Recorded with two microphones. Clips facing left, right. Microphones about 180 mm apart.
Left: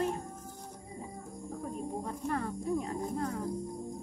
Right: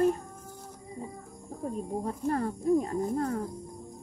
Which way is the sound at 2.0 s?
40° right (ahead or behind).